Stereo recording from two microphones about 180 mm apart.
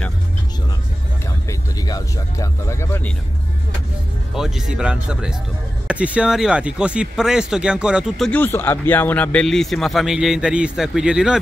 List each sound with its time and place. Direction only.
1.5 s speech: 20° left (ahead or behind)
4.3 s speech: 5° right (ahead or behind)
8.3 s speech: 10° left (ahead or behind)